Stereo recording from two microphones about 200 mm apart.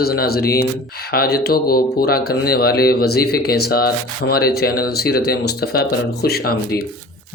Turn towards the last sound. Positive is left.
turn(degrees=50)  # may be behind; listen again after turning